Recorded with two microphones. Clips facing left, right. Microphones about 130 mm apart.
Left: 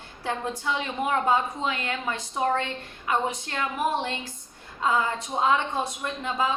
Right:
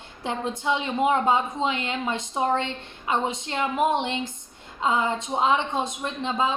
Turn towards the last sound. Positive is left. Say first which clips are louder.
# right 2 dB
turn(degrees=-25)  # may be behind; listen again after turning